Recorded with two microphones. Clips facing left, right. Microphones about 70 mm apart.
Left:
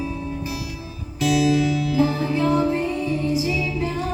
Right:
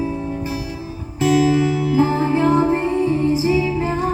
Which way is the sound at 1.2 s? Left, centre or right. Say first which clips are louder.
Right 3 dB; right.